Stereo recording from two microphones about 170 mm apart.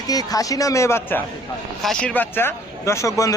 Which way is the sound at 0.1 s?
20° left (ahead or behind).